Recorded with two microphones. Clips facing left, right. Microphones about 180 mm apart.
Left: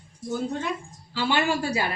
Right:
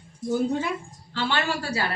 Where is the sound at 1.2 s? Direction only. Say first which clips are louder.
Left 2 dB; 15° left (ahead or behind).